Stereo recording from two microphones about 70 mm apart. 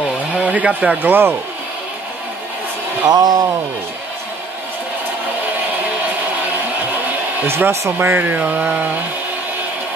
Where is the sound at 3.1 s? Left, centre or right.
Right.